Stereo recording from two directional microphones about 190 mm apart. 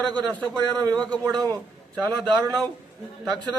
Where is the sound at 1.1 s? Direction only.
20° right (ahead or behind).